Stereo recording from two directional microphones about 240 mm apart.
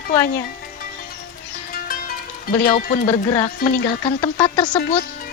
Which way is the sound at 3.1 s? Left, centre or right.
Centre.